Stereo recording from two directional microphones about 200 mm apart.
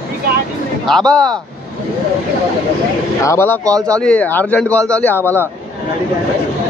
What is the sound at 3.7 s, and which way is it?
Speech, 15° right (ahead or behind).